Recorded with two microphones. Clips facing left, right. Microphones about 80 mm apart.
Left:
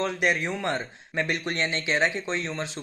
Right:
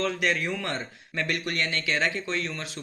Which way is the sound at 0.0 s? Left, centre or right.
Left.